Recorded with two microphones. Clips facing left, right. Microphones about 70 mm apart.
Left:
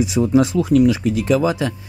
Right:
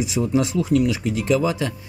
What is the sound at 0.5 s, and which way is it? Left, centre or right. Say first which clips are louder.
Speech: left 5 dB; left.